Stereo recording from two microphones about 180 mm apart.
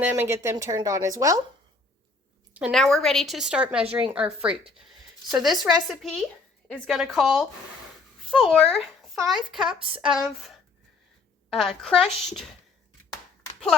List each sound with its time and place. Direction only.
0.0 s speech: 10° right (ahead or behind)
2.5 s a woman's voice: 5° right (ahead or behind)
11.5 s a woman's voice: centre (ahead or behind)